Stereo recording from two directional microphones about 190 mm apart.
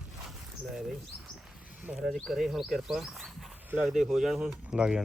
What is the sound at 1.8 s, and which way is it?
Speech, 5° right (ahead or behind).